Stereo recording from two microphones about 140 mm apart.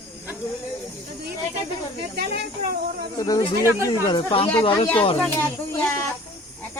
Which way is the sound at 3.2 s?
30° left (ahead or behind).